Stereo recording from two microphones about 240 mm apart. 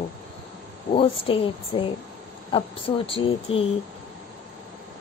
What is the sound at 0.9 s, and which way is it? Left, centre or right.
Speech, left.